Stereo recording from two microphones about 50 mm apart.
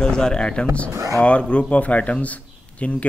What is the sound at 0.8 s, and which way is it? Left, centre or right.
Speech, right.